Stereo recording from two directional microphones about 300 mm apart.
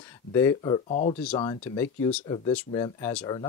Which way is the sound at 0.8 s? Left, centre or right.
Left.